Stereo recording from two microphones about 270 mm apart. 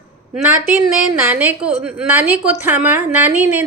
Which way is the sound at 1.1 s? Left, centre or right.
Centre.